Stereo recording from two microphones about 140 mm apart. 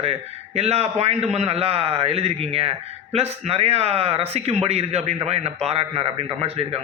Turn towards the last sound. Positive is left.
turn(degrees=-45)  # may be behind; listen again after turning